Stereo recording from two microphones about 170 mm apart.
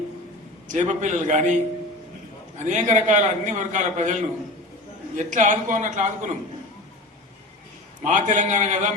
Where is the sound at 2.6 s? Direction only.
45° right (ahead or behind).